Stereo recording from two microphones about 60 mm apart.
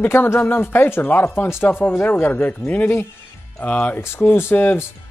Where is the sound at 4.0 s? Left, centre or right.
Left.